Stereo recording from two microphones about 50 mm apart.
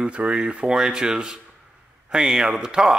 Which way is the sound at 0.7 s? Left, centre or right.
Centre.